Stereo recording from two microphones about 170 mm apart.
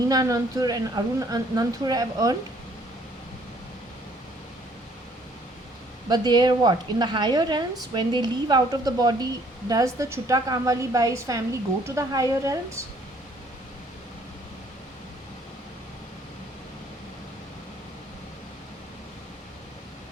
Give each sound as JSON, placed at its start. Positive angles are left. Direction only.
{"t": 0.1, "sound": "a woman's voice", "side_deg": -20}
{"t": 6.1, "sound": "a woman's voice", "side_deg": -25}